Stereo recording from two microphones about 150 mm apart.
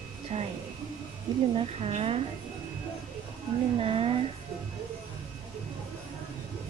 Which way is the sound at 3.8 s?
40° right (ahead or behind).